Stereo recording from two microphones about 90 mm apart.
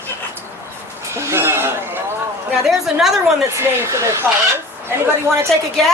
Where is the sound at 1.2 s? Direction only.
30° right (ahead or behind).